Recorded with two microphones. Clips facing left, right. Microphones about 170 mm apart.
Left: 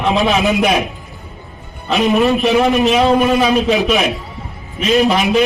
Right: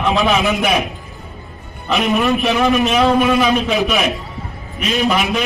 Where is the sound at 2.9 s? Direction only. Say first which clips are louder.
Left 2 dB; 35° left (ahead or behind).